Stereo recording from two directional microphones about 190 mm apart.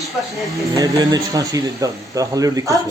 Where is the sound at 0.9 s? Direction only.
20° right (ahead or behind).